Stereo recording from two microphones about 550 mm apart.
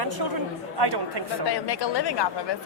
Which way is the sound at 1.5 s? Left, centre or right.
Left.